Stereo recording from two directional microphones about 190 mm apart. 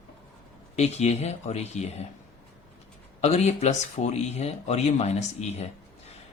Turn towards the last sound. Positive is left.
turn(degrees=35)  # may be behind; listen again after turning